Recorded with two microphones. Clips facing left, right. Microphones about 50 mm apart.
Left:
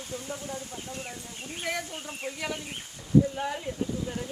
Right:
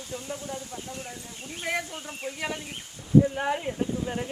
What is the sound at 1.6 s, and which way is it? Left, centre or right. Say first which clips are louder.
Speech: right 3 dB; right.